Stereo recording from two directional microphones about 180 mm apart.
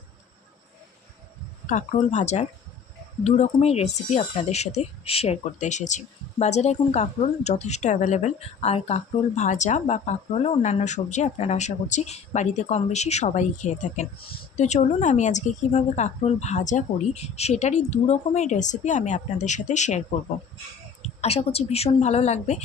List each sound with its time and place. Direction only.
1.7 s speech: 40° left (ahead or behind)